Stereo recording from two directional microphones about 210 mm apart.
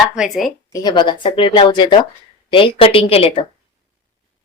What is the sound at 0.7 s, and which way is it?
A woman's voice, 20° left (ahead or behind).